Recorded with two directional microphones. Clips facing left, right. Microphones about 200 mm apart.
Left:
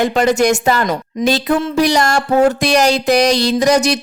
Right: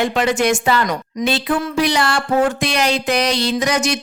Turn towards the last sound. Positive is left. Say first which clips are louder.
# left 5 dB
turn(degrees=35)  # may be behind; listen again after turning